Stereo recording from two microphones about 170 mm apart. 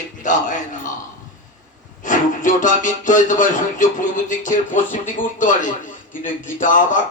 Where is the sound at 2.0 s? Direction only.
50° left (ahead or behind).